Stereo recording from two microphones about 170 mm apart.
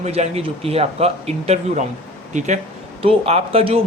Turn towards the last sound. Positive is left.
turn(degrees=-35)  # may be behind; listen again after turning